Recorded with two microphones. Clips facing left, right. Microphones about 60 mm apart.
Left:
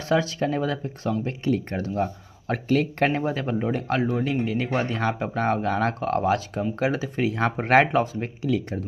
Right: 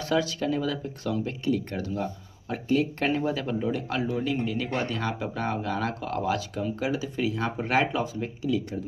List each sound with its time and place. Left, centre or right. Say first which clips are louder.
0.1 s speech: left 3 dB; left
2.4 s speech: left 3 dB; left
3.1 s speech: left 2 dB; left